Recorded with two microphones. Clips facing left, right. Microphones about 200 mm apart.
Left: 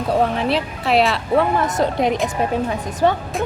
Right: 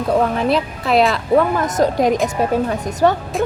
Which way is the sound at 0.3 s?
40° right (ahead or behind).